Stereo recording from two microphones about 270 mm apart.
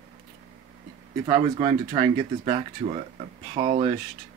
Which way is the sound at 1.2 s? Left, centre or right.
Centre.